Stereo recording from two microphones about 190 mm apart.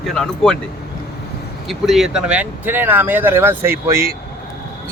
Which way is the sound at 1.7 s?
Centre (ahead or behind).